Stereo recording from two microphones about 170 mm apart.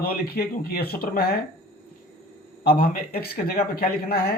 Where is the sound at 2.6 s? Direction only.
60° left (ahead or behind).